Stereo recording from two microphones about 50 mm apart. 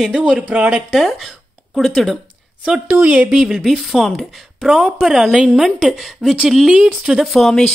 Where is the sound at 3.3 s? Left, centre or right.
Centre.